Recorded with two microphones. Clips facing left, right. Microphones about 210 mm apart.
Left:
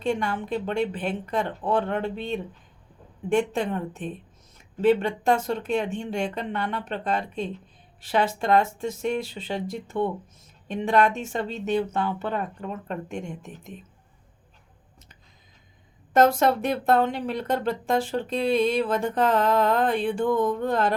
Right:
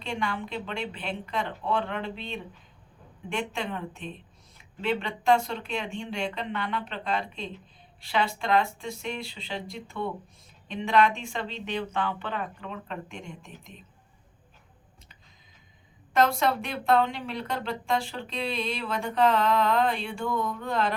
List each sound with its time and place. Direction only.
0.0 s speech: 45° left (ahead or behind)
16.1 s speech: 45° left (ahead or behind)